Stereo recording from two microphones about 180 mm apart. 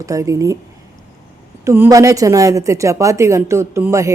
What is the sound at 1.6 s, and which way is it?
A woman's voice, 15° right (ahead or behind).